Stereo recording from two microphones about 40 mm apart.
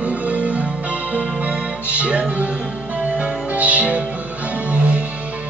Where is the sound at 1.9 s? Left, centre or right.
Right.